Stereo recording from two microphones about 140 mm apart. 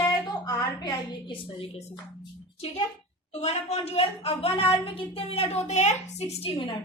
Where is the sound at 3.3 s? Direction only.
50° left (ahead or behind).